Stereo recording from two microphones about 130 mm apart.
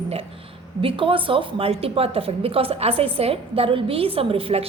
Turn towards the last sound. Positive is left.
turn(degrees=-45)  # may be behind; listen again after turning